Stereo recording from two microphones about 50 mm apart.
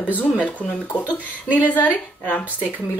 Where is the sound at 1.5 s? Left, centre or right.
Left.